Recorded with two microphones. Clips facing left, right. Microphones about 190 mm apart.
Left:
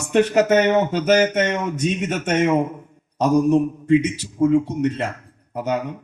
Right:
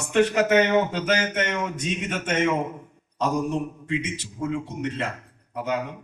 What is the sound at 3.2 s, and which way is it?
A man's voice, 45° left (ahead or behind).